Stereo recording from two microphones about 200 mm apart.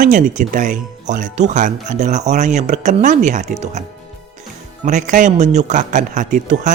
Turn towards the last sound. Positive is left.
turn(degrees=-40)  # may be behind; listen again after turning